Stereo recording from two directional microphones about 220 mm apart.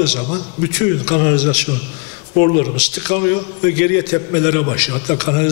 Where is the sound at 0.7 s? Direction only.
15° left (ahead or behind).